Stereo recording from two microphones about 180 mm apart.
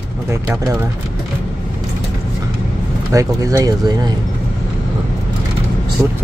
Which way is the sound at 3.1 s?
20° right (ahead or behind).